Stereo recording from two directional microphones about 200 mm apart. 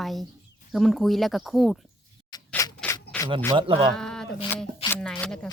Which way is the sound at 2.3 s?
20° left (ahead or behind).